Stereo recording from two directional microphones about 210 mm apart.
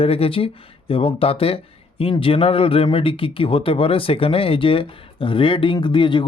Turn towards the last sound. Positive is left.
turn(degrees=25)  # may be behind; listen again after turning